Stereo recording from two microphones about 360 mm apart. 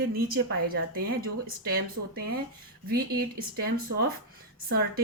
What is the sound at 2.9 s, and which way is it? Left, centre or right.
A woman's voice, right.